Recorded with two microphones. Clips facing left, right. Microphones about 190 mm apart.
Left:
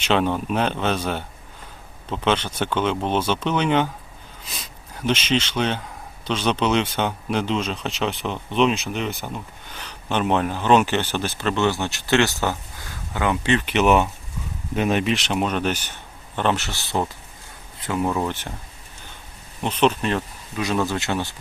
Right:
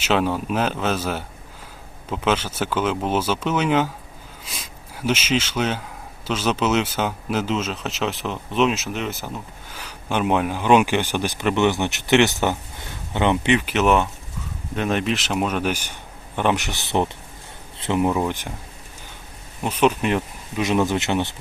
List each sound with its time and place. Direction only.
0.0 s speech: 5° right (ahead or behind); by 13.6 s 20° right (ahead or behind)
13.6 s speech: centre (ahead or behind); by 17.1 s 20° right (ahead or behind)
17.7 s a sound: 25° right (ahead or behind)
18.0 s speech: 15° right (ahead or behind)
19.6 s speech: 10° right (ahead or behind)